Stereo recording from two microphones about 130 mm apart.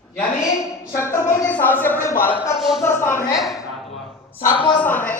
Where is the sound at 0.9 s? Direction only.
20° left (ahead or behind).